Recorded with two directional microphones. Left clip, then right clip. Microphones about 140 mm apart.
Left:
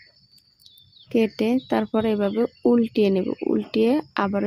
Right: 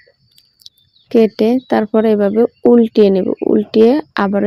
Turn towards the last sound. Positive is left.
turn(degrees=-35)  # may be behind; listen again after turning